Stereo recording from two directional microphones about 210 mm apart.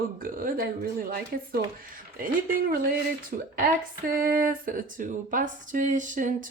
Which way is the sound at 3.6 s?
40° right (ahead or behind).